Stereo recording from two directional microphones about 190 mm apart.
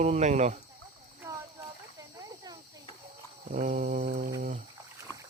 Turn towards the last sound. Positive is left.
turn(degrees=-50)  # may be behind; listen again after turning